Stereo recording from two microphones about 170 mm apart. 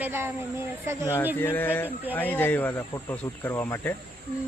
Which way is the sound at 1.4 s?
10° left (ahead or behind).